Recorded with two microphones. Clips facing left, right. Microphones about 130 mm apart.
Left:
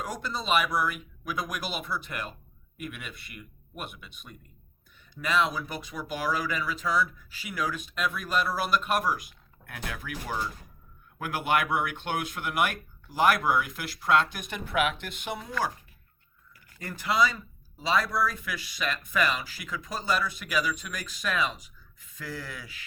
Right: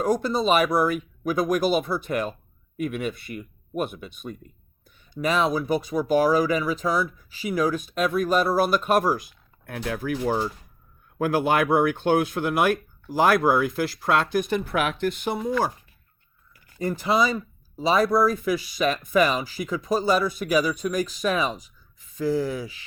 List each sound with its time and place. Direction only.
0.0 s speech: 40° right (ahead or behind)
5.4 s speech: 40° right (ahead or behind)
15.4 s speech: 25° right (ahead or behind)
16.7 s speech: 30° right (ahead or behind)
17.1 s speech: 15° right (ahead or behind)
18.1 s speech: 40° right (ahead or behind)
18.9 s speech: 15° right (ahead or behind)
19.7 s speech: 35° right (ahead or behind)
21.0 s speech: 15° right (ahead or behind)
22.5 s speech: 30° right (ahead or behind)